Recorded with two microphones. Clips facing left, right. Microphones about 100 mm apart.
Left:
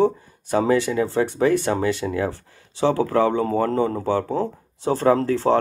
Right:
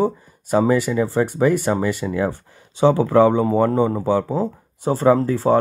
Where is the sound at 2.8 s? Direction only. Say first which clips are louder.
Right 5 dB; 20° right (ahead or behind).